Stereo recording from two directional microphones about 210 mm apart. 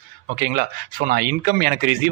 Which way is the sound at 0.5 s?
45° right (ahead or behind).